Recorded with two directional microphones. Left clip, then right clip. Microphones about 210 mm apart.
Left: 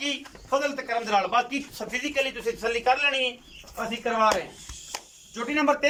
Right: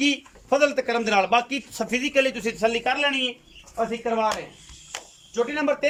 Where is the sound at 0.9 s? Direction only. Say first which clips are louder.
Right 4 dB; 50° right (ahead or behind).